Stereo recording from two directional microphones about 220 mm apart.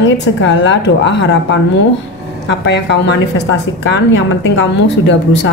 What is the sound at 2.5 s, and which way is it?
A woman's voice, 55° left (ahead or behind).